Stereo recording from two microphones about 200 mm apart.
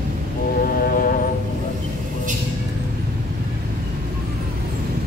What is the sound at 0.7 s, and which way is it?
Music, 45° left (ahead or behind).